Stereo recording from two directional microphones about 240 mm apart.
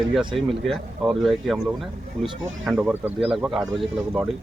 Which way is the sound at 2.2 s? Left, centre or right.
Centre.